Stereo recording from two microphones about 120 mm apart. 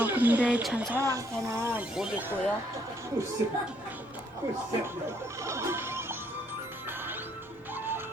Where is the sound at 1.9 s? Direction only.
5° right (ahead or behind).